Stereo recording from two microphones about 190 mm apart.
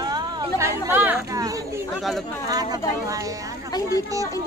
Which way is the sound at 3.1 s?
20° right (ahead or behind).